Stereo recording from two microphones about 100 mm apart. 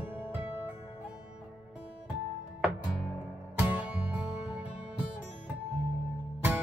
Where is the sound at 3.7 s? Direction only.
15° right (ahead or behind).